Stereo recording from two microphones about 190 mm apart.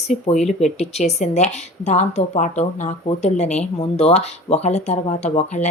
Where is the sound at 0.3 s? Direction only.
35° left (ahead or behind).